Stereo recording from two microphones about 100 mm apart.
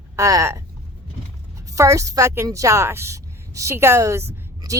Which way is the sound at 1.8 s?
35° right (ahead or behind).